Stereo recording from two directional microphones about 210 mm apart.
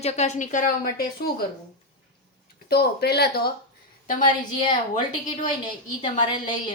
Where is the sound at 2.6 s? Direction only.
50° left (ahead or behind).